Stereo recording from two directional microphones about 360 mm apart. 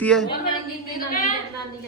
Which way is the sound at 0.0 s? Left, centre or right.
Centre.